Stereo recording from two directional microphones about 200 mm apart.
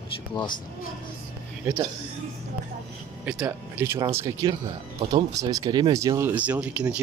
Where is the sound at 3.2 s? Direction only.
5° right (ahead or behind).